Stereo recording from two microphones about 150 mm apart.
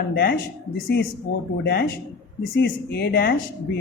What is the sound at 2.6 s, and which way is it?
Speech, 90° left.